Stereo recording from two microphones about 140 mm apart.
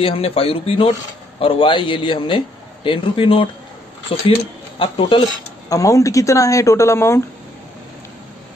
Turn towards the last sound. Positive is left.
turn(degrees=20)  # may be behind; listen again after turning